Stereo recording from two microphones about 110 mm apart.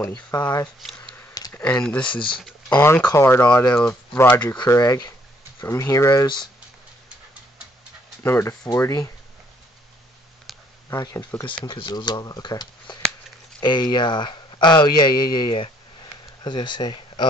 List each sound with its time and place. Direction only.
0.1 s speech: 40° left (ahead or behind)
0.7 s speech: centre (ahead or behind)
1.0 s a sound: 20° left (ahead or behind)
1.8 s speech: 10° left (ahead or behind)
2.0 s speech: 50° left (ahead or behind)
2.7 s speech: 20° left (ahead or behind)
3.7 s speech: 10° left (ahead or behind)
4.6 s speech: 35° left (ahead or behind)
6.2 s speech: 45° left (ahead or behind)
8.2 s speech: 25° left (ahead or behind)
10.5 s a sound: centre (ahead or behind)
11.0 s speech: 35° left (ahead or behind)
11.4 s speech: 45° left (ahead or behind)